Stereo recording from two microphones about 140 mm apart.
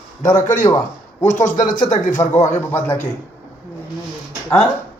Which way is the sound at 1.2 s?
65° left (ahead or behind).